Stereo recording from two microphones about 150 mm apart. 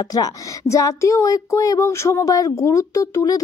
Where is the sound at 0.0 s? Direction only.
25° left (ahead or behind).